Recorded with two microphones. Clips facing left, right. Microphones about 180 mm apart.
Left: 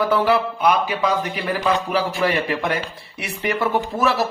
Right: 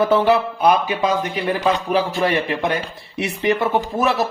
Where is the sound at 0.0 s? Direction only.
20° right (ahead or behind).